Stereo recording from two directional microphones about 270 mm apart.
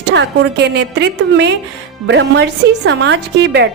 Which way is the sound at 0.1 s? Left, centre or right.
Right.